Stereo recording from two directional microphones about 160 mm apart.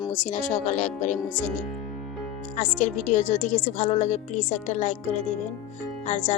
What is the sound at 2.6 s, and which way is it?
A woman's voice, 50° left (ahead or behind).